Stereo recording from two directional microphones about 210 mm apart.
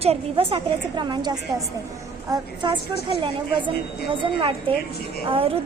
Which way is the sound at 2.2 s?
20° right (ahead or behind).